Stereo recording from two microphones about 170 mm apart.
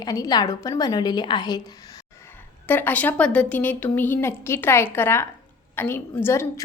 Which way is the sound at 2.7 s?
10° left (ahead or behind).